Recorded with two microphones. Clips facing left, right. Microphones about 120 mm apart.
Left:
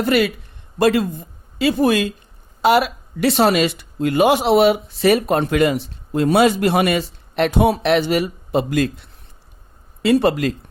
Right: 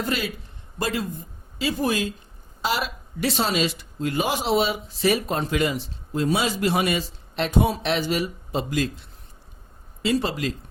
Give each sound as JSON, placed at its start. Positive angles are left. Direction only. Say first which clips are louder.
{"t": 0.0, "sound": "a man's voice", "louder": "left 10 dB", "side_deg": 70}